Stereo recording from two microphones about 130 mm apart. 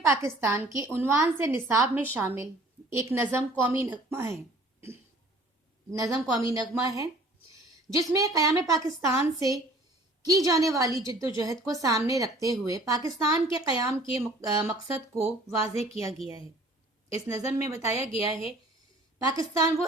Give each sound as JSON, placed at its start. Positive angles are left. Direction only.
{"t": 0.0, "sound": "a woman's voice", "side_deg": -20}
{"t": 5.9, "sound": "a woman's voice", "side_deg": -25}
{"t": 15.7, "sound": "a woman's voice", "side_deg": 55}
{"t": 17.7, "sound": "a woman's voice", "side_deg": -20}
{"t": 19.2, "sound": "a woman's voice", "side_deg": -30}